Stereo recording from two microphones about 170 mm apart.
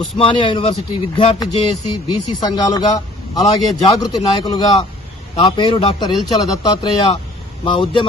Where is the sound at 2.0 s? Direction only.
25° left (ahead or behind).